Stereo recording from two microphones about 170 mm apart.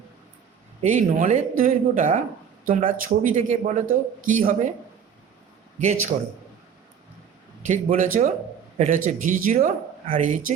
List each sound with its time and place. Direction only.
0.9 s a man's voice: 50° right (ahead or behind)
5.8 s a man's voice: 45° right (ahead or behind)
7.7 s a man's voice: 50° right (ahead or behind)